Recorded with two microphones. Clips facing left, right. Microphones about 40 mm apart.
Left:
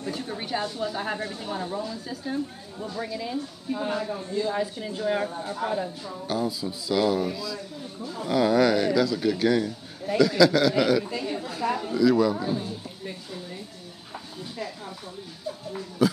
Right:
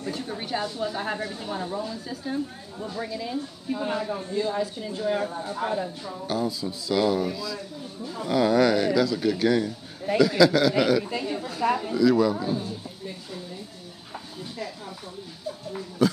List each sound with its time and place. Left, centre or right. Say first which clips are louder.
0.0 s speech: even; centre
4.1 s speech: right 1 dB; right
4.5 s speech: even; centre
5.6 s speech: even; right
6.2 s a man's voice: even; centre
16.0 s a sound: even; centre